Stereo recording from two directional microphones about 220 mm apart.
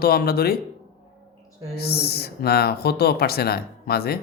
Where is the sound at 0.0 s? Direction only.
45° left (ahead or behind).